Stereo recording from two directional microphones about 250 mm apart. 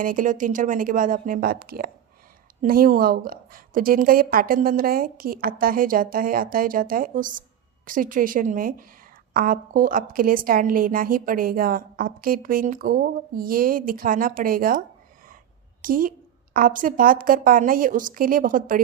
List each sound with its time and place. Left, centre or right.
0.0 s a woman's voice: right